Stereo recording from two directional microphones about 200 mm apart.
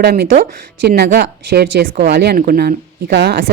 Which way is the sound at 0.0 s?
50° right (ahead or behind).